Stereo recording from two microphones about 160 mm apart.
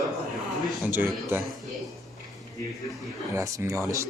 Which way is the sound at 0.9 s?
15° right (ahead or behind).